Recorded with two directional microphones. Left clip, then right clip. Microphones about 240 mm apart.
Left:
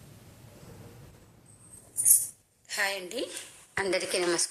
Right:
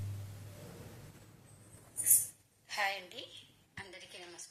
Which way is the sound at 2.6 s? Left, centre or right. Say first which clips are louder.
Left 5 dB; left.